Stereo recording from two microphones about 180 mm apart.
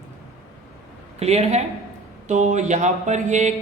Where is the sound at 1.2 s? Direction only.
35° right (ahead or behind).